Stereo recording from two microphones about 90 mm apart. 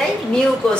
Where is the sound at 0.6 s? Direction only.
5° left (ahead or behind).